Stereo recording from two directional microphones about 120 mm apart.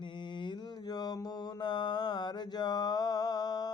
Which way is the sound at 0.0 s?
40° left (ahead or behind).